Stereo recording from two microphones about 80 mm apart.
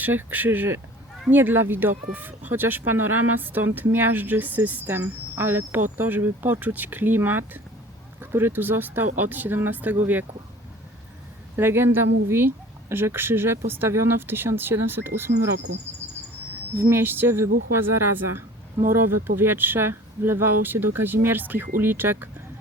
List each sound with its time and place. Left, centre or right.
0.0 s speech: right
11.5 s speech: right
16.9 s speech: right